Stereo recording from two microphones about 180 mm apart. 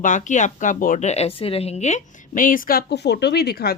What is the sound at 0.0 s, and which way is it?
Speech, 45° left (ahead or behind).